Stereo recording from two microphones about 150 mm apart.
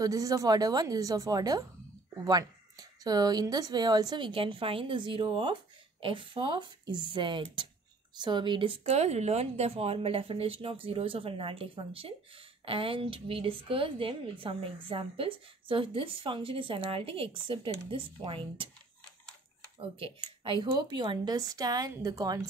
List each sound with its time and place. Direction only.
0.0 s a woman's voice: 25° right (ahead or behind)
8.8 s a woman's voice: 45° right (ahead or behind)
20.0 s speech: 35° right (ahead or behind)